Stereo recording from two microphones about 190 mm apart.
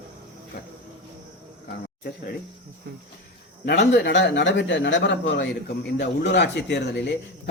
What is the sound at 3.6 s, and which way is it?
A man's voice, 65° left (ahead or behind).